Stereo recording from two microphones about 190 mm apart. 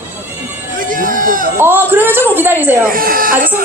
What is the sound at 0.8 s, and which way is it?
Run, 45° right (ahead or behind).